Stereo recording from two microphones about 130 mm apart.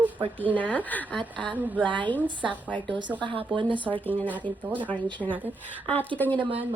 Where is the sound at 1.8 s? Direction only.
10° left (ahead or behind).